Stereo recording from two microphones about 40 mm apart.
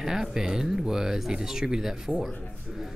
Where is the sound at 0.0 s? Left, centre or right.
Centre.